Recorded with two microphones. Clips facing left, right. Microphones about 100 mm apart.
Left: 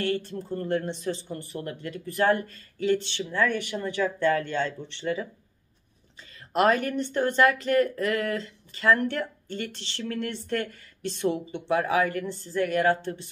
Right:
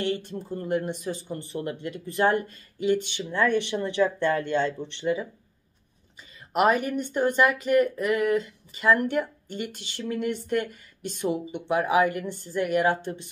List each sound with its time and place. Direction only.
0.0 s speech: 20° right (ahead or behind)
6.5 s speech: 10° right (ahead or behind)